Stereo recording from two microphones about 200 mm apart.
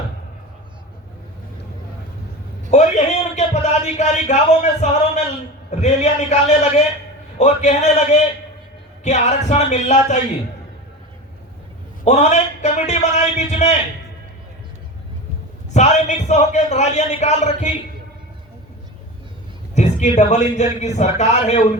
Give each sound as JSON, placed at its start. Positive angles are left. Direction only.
{"t": 2.6, "sound": "a sound", "side_deg": 35}
{"t": 5.7, "sound": "a man's voice", "side_deg": 35}
{"t": 12.0, "sound": "a man's voice", "side_deg": 35}
{"t": 15.7, "sound": "a man's voice", "side_deg": 35}
{"t": 19.7, "sound": "a man's voice", "side_deg": 35}